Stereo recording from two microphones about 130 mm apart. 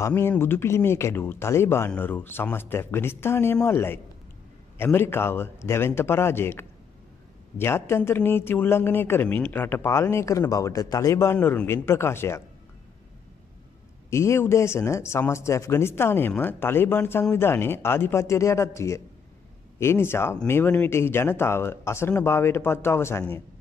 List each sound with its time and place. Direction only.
0.0 s speech: 15° left (ahead or behind)
11.3 s speech: 15° left (ahead or behind)
14.1 s speech: 20° left (ahead or behind)